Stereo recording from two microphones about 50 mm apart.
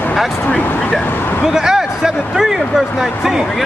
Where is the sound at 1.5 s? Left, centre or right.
Centre.